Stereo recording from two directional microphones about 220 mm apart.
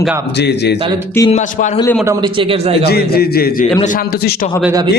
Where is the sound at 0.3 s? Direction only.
50° left (ahead or behind).